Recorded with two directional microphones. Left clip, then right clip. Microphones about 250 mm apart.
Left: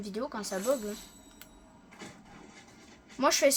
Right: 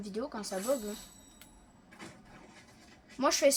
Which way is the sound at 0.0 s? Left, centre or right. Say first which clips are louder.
Left 2 dB; centre.